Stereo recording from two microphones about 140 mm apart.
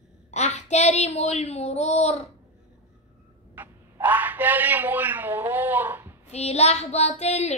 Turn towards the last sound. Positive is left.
turn(degrees=50)  # may be behind; listen again after turning